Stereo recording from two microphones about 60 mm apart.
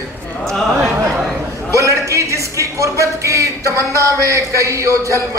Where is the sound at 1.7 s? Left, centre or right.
Right.